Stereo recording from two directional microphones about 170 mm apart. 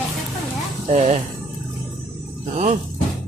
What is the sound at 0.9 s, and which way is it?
Speech, 40° right (ahead or behind).